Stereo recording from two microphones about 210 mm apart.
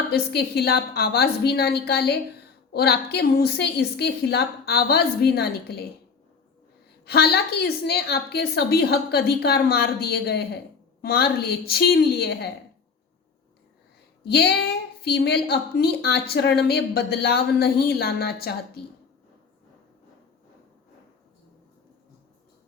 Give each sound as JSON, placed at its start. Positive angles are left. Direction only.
{"t": 0.1, "sound": "a woman's voice", "side_deg": 50}
{"t": 7.0, "sound": "a woman's voice", "side_deg": 50}
{"t": 14.3, "sound": "a woman's voice", "side_deg": 50}